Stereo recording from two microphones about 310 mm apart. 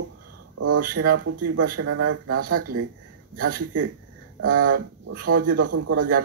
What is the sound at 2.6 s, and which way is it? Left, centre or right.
Speech, right.